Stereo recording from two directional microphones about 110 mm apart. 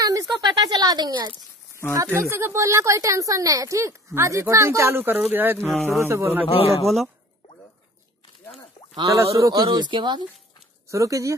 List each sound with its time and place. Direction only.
0.0 s a sound: 35° right (ahead or behind)
2.1 s speech: 20° right (ahead or behind)
5.7 s speech: centre (ahead or behind)
5.9 s speech: 25° right (ahead or behind)
6.4 s a man's voice: 65° left (ahead or behind)
8.9 s speech: 30° right (ahead or behind)
10.9 s speech: 30° right (ahead or behind)